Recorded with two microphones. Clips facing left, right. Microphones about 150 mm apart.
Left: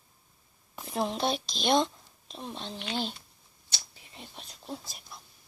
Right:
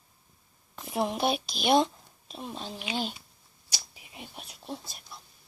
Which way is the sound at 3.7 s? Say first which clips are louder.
Right 2 dB; 10° right (ahead or behind).